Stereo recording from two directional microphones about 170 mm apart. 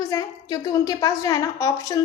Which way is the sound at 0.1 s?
20° left (ahead or behind).